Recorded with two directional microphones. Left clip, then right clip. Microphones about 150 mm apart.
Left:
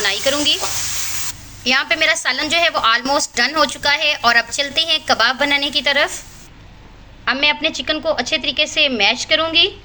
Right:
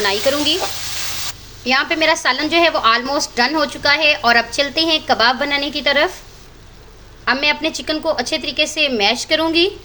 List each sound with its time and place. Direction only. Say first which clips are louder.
0.0 s a woman's voice: right 1 dB; 25° right (ahead or behind)
1.6 s a woman's voice: even; 25° right (ahead or behind)
7.3 s a woman's voice: even; 25° right (ahead or behind)